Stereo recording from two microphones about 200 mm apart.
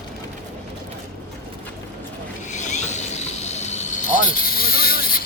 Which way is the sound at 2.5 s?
35° left (ahead or behind).